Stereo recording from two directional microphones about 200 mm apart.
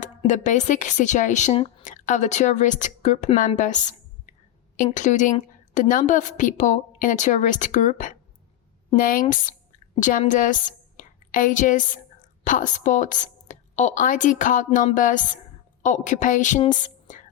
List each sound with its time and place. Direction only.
0.2 s a woman's voice: 35° left (ahead or behind)